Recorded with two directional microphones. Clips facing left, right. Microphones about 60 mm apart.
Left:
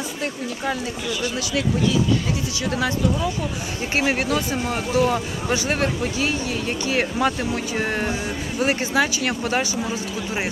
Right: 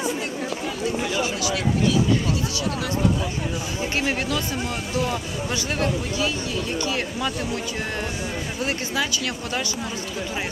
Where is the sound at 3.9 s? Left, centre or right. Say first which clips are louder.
Left 5 dB; left.